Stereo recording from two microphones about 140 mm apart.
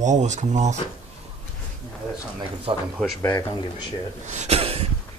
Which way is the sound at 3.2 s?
25° left (ahead or behind).